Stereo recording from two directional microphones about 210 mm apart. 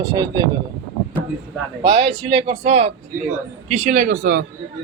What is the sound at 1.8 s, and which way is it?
A man's voice, 20° right (ahead or behind).